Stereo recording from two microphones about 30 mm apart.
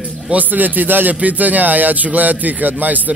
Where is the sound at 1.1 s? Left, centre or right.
Right.